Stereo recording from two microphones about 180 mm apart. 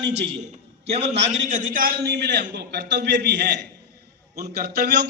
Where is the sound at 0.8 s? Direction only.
35° right (ahead or behind).